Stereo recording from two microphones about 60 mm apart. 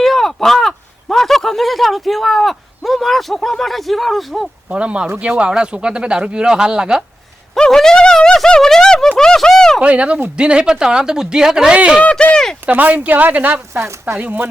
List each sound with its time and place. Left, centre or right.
0.0 s speech: centre
4.7 s speech: centre
7.5 s speech: centre
9.8 s speech: right
12.1 s speech: centre
12.6 s speech: right